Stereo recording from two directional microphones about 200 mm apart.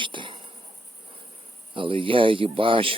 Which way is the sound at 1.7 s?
25° right (ahead or behind).